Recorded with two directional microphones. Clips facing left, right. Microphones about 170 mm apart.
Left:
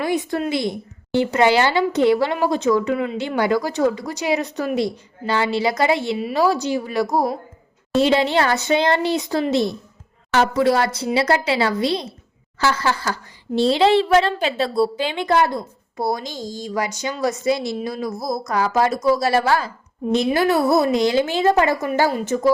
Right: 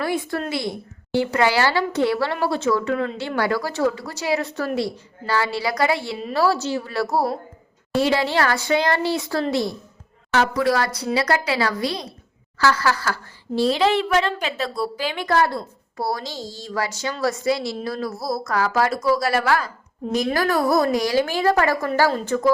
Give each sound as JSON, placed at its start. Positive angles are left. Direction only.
{"t": 0.0, "sound": "a woman's voice", "side_deg": 20}